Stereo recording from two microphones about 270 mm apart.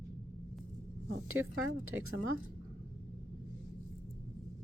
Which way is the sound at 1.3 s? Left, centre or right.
Right.